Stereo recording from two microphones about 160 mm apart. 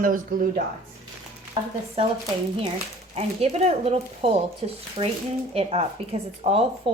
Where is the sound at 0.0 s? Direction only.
60° right (ahead or behind).